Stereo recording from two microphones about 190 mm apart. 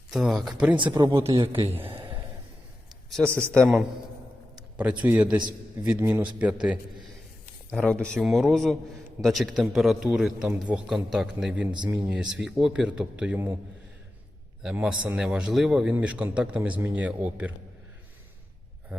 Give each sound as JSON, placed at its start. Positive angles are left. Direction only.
{"t": 0.1, "sound": "a man's voice", "side_deg": 0}
{"t": 0.8, "sound": "a man's voice", "side_deg": -25}
{"t": 3.2, "sound": "a man's voice", "side_deg": 5}
{"t": 7.7, "sound": "a man's voice", "side_deg": 5}
{"t": 11.7, "sound": "a man's voice", "side_deg": -25}
{"t": 12.0, "sound": "a man's voice", "side_deg": -5}
{"t": 14.6, "sound": "a man's voice", "side_deg": -5}